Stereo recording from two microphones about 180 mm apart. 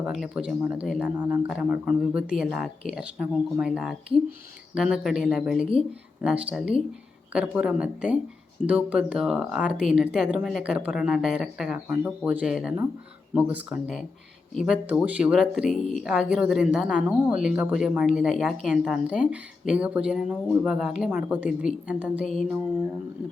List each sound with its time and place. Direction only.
0.0 s a man's voice: centre (ahead or behind)